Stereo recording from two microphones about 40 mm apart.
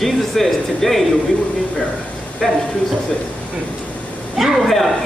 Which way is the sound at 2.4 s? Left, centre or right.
Centre.